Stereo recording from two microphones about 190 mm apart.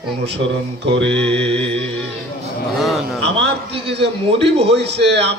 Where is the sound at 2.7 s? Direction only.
Centre (ahead or behind).